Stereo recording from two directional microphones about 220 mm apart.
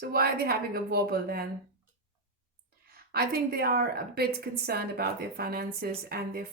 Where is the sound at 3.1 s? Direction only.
45° right (ahead or behind).